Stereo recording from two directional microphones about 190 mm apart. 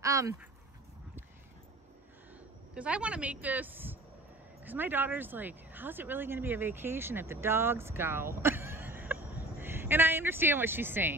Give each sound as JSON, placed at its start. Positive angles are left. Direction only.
{"t": 0.0, "sound": "speech", "side_deg": -15}
{"t": 2.7, "sound": "a woman's voice", "side_deg": -5}